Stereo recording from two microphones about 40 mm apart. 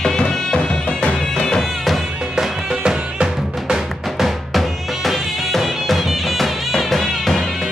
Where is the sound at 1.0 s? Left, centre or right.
Left.